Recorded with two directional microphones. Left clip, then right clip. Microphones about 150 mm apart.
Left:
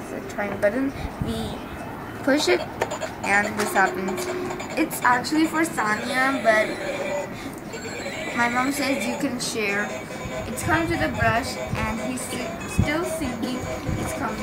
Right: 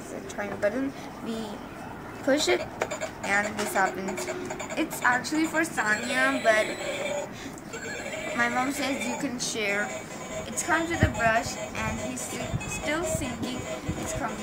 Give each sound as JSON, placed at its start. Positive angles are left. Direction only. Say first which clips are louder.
{"t": 0.4, "sound": "speech", "louder": "left 5 dB", "side_deg": -5}
{"t": 2.2, "sound": "speech", "louder": "left 4 dB", "side_deg": 0}
{"t": 4.7, "sound": "speech", "louder": "left 5 dB", "side_deg": -10}
{"t": 5.9, "sound": "a woman's voice", "louder": "left 2 dB", "side_deg": -40}
{"t": 8.4, "sound": "speech", "louder": "left 4 dB", "side_deg": -5}